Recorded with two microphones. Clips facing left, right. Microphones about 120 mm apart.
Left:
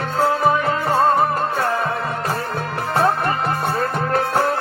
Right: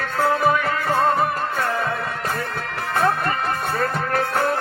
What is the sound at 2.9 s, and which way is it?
Music, 30° left (ahead or behind).